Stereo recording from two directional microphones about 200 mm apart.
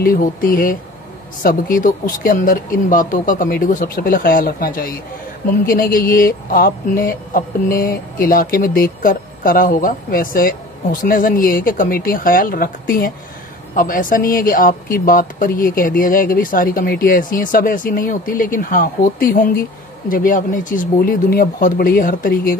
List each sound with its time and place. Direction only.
0.0 s speech: 45° left (ahead or behind)